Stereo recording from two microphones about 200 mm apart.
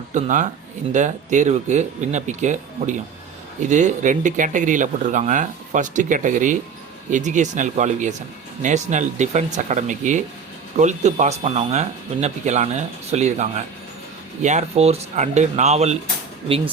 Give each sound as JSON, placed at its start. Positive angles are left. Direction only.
{"t": 0.1, "sound": "speech", "side_deg": -40}